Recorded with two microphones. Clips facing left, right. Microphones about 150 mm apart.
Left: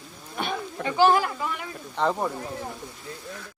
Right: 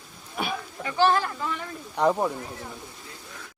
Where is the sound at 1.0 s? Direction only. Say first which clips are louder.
Left 2 dB; 15° left (ahead or behind).